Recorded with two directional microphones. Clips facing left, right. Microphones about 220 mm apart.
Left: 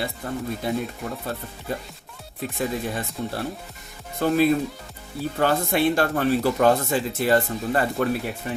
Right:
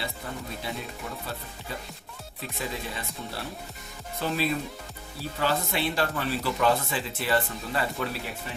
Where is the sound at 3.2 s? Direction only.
45° left (ahead or behind).